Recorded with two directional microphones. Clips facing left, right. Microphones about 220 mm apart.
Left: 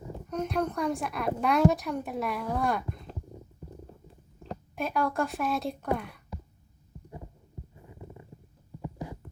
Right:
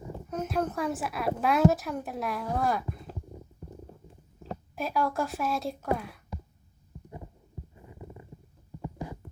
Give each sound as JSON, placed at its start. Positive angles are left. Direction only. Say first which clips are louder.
{"t": 0.3, "sound": "a woman's voice", "louder": "left 1 dB", "side_deg": -5}
{"t": 4.7, "sound": "a woman's voice", "louder": "even", "side_deg": 0}